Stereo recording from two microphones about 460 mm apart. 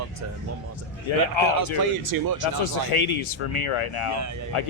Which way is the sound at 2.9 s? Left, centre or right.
Left.